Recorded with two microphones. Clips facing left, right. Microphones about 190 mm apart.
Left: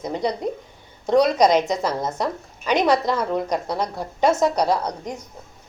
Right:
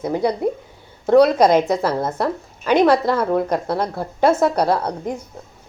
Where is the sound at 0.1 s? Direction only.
5° right (ahead or behind).